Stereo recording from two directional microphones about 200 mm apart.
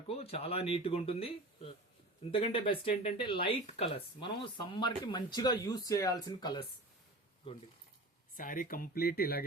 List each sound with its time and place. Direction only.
0.1 s speech: 30° left (ahead or behind)
8.4 s speech: 45° left (ahead or behind)